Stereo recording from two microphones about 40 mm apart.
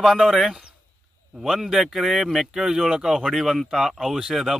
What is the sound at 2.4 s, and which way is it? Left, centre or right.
Speech, centre.